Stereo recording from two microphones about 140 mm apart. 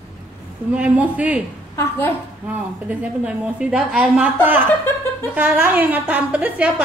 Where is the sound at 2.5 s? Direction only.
10° right (ahead or behind).